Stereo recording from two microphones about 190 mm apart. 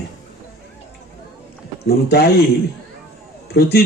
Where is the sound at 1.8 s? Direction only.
55° left (ahead or behind).